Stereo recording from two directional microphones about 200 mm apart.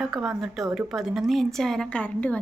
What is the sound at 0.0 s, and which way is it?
A woman's voice, centre (ahead or behind).